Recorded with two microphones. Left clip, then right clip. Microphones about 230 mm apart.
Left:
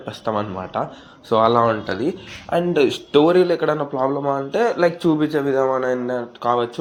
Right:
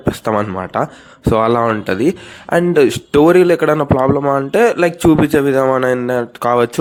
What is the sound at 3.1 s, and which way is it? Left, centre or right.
A man's voice, right.